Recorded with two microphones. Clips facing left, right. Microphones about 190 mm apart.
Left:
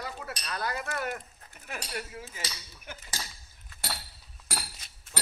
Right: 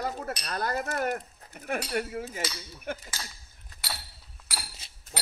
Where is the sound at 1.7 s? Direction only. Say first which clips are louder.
Right 8 dB; 55° right (ahead or behind).